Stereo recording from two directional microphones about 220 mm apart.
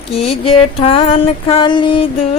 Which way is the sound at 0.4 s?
25° left (ahead or behind).